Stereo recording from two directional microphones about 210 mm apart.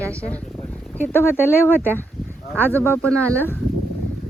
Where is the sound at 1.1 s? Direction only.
10° left (ahead or behind).